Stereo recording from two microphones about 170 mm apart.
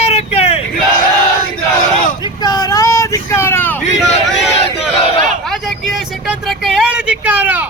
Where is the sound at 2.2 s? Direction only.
25° left (ahead or behind).